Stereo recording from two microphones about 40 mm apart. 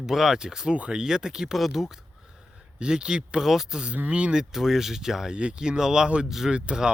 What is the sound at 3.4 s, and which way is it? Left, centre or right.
Speech, centre.